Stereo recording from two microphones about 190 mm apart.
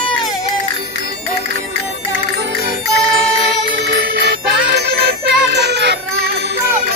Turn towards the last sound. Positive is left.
turn(degrees=-60)  # may be behind; listen again after turning